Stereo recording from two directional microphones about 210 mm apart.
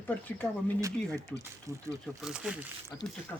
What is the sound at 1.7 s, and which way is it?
Speech, 15° right (ahead or behind).